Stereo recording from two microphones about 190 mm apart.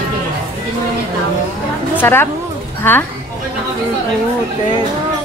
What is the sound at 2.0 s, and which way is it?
Speech, 10° left (ahead or behind).